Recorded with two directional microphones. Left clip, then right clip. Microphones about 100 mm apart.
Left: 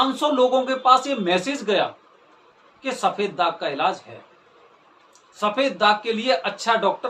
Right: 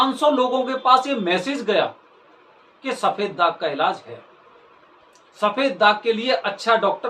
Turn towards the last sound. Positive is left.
turn(degrees=25)  # may be behind; listen again after turning